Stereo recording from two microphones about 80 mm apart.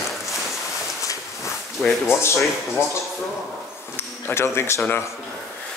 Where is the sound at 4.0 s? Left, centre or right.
Left.